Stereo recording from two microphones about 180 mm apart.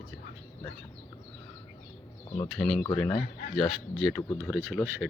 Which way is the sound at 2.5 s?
Centre (ahead or behind).